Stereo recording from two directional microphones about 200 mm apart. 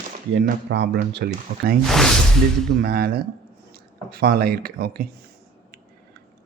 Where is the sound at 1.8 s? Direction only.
Centre (ahead or behind).